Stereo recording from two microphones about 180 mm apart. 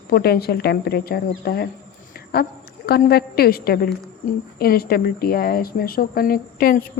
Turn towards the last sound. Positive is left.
turn(degrees=55)  # may be behind; listen again after turning